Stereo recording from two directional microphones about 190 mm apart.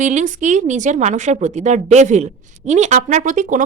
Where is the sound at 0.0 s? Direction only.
40° right (ahead or behind).